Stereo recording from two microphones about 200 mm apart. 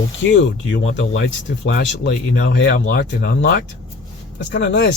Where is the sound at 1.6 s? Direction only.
55° left (ahead or behind).